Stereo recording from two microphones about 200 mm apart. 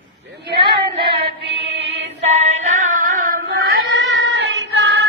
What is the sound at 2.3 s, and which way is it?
Female singing, 35° right (ahead or behind).